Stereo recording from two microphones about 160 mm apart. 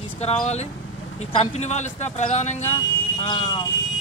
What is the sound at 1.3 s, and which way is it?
Speech, 40° left (ahead or behind).